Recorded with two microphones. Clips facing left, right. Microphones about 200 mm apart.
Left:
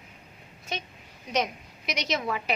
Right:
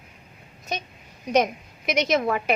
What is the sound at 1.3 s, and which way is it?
A woman's voice, 50° right (ahead or behind).